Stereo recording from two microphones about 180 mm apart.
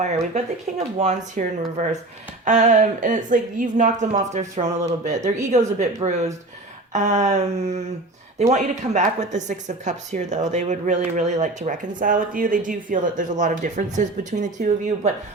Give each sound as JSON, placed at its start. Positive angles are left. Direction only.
{"t": 0.9, "sound": "speech", "side_deg": -40}